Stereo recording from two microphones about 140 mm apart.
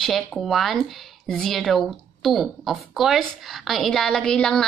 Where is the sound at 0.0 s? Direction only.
Centre (ahead or behind).